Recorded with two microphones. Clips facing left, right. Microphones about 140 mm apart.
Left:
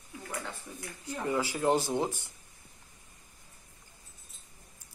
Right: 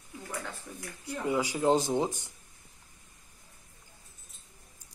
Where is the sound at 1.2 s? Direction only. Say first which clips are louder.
Right 2 dB; 15° right (ahead or behind).